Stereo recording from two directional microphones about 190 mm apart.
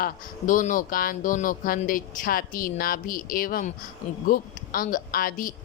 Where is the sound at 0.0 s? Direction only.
45° left (ahead or behind).